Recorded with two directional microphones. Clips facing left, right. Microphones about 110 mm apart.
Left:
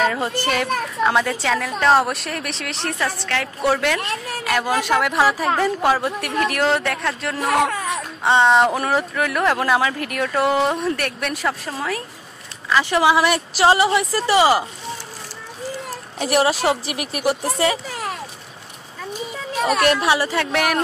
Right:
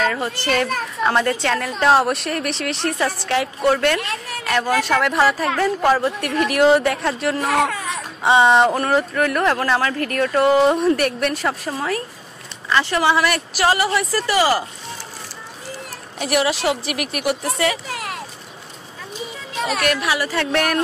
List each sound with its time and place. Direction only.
0.0 s a child's voice: 15° left (ahead or behind)
0.5 s a woman's voice: 5° left (ahead or behind)
3.6 s a woman's voice: 5° left (ahead or behind)
6.5 s a woman's voice: 5° right (ahead or behind)
12.9 s speech: 15° left (ahead or behind)
16.2 s a woman's voice: 35° left (ahead or behind)
19.6 s a woman's voice: 30° left (ahead or behind)
20.3 s a woman's voice: 5° left (ahead or behind)